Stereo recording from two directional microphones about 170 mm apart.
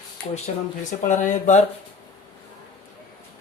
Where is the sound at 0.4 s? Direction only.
45° left (ahead or behind).